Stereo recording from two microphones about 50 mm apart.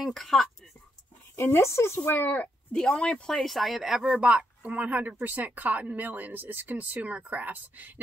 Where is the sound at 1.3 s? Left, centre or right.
Left.